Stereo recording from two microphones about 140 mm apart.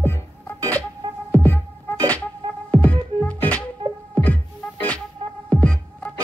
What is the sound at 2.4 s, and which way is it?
Music, 40° right (ahead or behind).